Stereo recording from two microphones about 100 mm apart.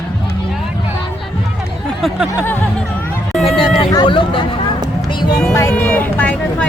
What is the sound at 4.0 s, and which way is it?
Speech, 55° left (ahead or behind).